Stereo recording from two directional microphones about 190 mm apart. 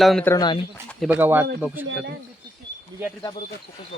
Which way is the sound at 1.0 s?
10° right (ahead or behind).